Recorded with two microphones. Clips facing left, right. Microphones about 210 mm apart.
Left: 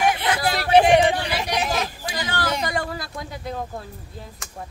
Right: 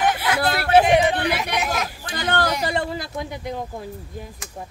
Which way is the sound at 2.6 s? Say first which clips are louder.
Right 2 dB; 25° right (ahead or behind).